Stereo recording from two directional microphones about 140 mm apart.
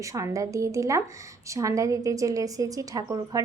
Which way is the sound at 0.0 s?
25° right (ahead or behind).